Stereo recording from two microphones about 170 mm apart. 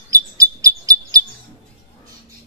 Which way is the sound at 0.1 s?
20° right (ahead or behind).